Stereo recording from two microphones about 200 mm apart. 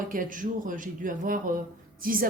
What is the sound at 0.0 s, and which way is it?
A woman's voice, 40° right (ahead or behind).